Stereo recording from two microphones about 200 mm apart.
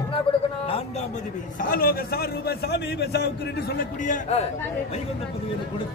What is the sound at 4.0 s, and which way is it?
Speech, 35° left (ahead or behind).